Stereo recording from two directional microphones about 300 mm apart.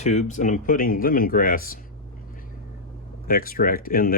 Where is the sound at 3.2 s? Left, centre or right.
Left.